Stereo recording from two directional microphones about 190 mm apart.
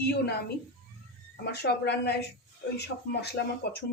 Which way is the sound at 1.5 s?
60° left (ahead or behind).